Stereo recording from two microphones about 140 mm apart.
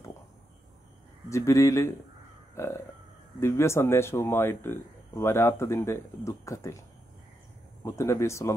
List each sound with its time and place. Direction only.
1.3 s speech: 20° left (ahead or behind)
2.5 s burping: 20° left (ahead or behind)
3.3 s speech: 20° left (ahead or behind)
7.8 s speech: 20° left (ahead or behind)